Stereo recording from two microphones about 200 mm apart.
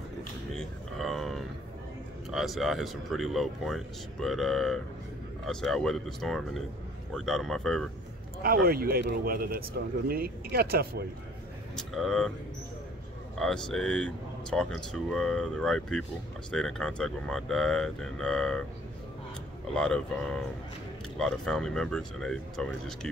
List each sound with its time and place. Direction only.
0.6 s a sound: centre (ahead or behind)
2.3 s speech: centre (ahead or behind)
8.4 s speech: 50° right (ahead or behind)
11.7 s speech: centre (ahead or behind)
13.4 s speech: 5° left (ahead or behind)
19.7 s speech: 5° left (ahead or behind)